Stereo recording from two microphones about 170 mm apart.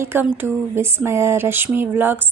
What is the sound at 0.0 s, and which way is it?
Speech, 15° right (ahead or behind).